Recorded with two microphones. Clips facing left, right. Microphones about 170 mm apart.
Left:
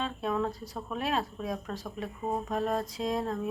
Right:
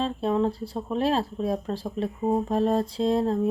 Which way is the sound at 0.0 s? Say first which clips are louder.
Right 7 dB; 30° right (ahead or behind).